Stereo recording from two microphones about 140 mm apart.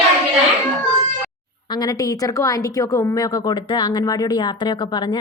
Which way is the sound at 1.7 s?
30° left (ahead or behind).